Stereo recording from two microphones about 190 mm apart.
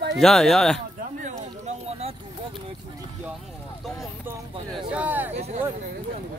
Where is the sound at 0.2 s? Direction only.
Centre (ahead or behind).